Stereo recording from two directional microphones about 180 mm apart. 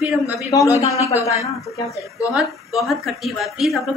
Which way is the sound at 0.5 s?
15° left (ahead or behind).